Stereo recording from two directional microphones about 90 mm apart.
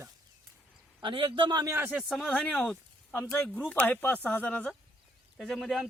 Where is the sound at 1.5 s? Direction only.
50° right (ahead or behind).